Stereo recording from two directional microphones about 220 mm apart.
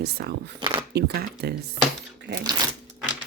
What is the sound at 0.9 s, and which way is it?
Speech, 45° right (ahead or behind).